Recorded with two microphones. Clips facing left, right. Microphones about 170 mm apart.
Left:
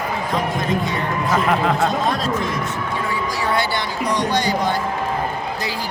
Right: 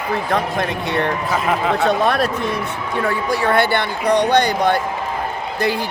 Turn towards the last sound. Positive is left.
turn(degrees=-60)  # may be behind; listen again after turning